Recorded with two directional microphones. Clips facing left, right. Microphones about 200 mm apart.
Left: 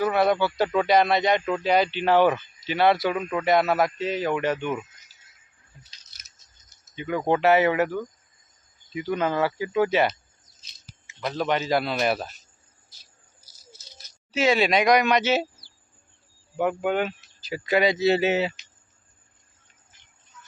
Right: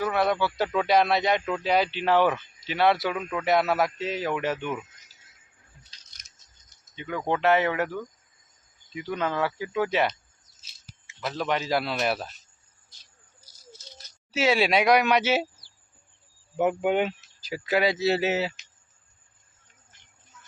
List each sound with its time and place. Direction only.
0.0 s speech: centre (ahead or behind)
6.1 s a sound: 5° left (ahead or behind)
6.7 s cricket: 5° left (ahead or behind)
7.2 s speech: 10° left (ahead or behind)
14.3 s speech: 5° right (ahead or behind)
16.6 s speech: 20° right (ahead or behind)
17.5 s speech: 5° right (ahead or behind)